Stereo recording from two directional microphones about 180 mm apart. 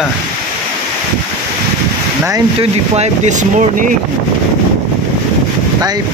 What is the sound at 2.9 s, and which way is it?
Speech, 40° right (ahead or behind).